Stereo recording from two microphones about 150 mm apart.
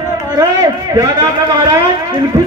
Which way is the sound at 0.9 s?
25° right (ahead or behind).